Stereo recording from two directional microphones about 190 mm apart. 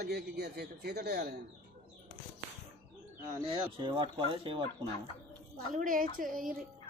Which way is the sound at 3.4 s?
25° right (ahead or behind).